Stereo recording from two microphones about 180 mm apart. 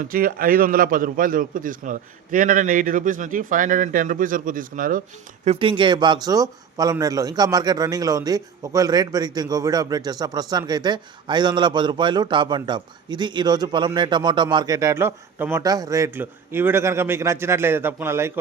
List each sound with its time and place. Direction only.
0.0 s a man's voice: 50° right (ahead or behind)
5.5 s a man's voice: 30° right (ahead or behind)